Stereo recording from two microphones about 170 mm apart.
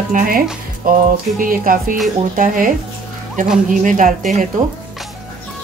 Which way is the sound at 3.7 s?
50° right (ahead or behind).